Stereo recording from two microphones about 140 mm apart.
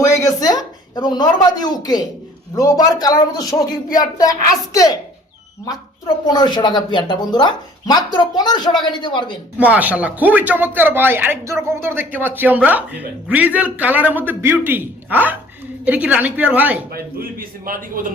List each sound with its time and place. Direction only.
0.0 s a sound: 25° left (ahead or behind)
2.6 s speech: 25° left (ahead or behind)
6.2 s speech: 30° left (ahead or behind)
9.6 s a man's voice: 10° right (ahead or behind)
16.9 s a man's voice: 90° right